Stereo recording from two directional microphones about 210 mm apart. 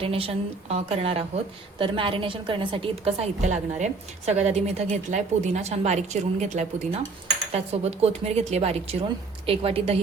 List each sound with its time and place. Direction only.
0.0 s a woman's voice: 25° right (ahead or behind)